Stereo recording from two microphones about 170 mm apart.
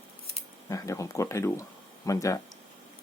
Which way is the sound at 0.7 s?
20° left (ahead or behind).